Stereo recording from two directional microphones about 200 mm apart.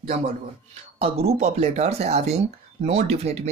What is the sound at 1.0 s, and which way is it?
Speech, 30° right (ahead or behind).